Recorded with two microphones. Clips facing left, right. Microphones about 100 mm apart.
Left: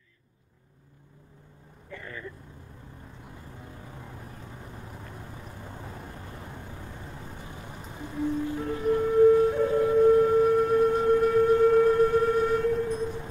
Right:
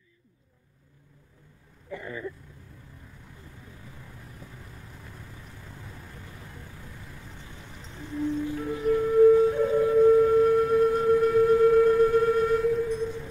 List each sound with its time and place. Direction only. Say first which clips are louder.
1.9 s speech: right 5 dB; 15° right (ahead or behind)
3.8 s vehicle: left 4 dB; 30° left (ahead or behind)
7.9 s a sound: even; 15° left (ahead or behind)
8.7 s music: right 1 dB; 30° left (ahead or behind)
9.0 s music: right 1 dB; centre (ahead or behind)